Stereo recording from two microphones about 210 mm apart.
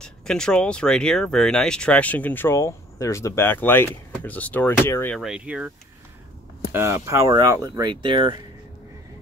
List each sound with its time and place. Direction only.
0.0 s speech: 5° left (ahead or behind)
5.2 s speech: 5° right (ahead or behind)
6.7 s speech: 10° right (ahead or behind)